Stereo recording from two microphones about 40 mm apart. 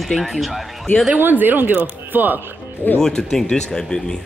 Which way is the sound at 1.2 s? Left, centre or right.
Right.